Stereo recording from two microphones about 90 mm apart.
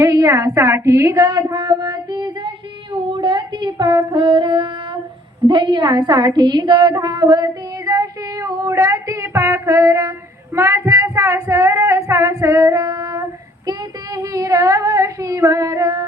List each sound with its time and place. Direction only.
0.0 s a woman's voice: 35° right (ahead or behind)
1.2 s a sound: 45° right (ahead or behind)
1.5 s female singing: 50° right (ahead or behind)
2.9 s a sound: 65° right (ahead or behind)
4.1 s music: 75° right (ahead or behind)
5.5 s a woman's voice: 60° right (ahead or behind)
6.9 s female singing: 50° right (ahead or behind)
13.7 s child singing: 40° right (ahead or behind)